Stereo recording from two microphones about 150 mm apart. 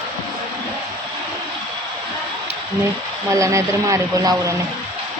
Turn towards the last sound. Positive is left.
turn(degrees=-20)  # may be behind; listen again after turning